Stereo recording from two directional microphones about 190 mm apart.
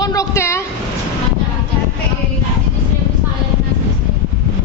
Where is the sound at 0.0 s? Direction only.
20° left (ahead or behind).